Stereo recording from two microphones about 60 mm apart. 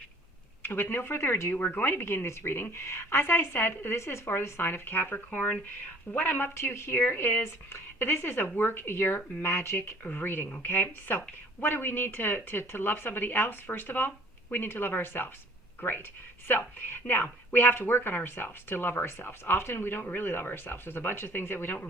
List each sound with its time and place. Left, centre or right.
0.6 s speech: left
10.0 s speech: left